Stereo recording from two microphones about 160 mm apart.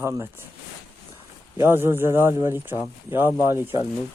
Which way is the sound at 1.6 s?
15° right (ahead or behind).